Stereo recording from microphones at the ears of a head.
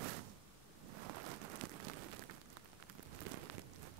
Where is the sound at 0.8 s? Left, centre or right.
Right.